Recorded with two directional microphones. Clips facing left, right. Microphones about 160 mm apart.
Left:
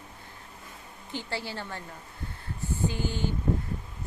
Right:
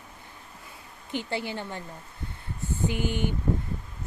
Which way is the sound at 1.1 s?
20° right (ahead or behind).